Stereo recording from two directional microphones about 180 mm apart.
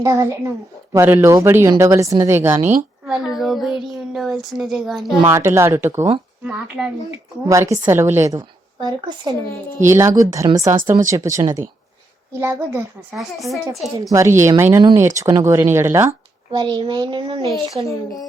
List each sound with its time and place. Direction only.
0.0 s a woman's voice: 20° right (ahead or behind)
2.6 s a woman's voice: centre (ahead or behind)
5.3 s a woman's voice: 15° right (ahead or behind)
7.1 s a woman's voice: 15° right (ahead or behind)
13.1 s a woman's voice: centre (ahead or behind)
14.1 s a woman's voice: 15° right (ahead or behind)
16.5 s a child's voice: 25° right (ahead or behind)
17.8 s speech: 20° left (ahead or behind)